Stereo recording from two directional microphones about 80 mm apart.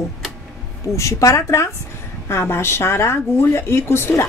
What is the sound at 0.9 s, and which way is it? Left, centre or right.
Speech, left.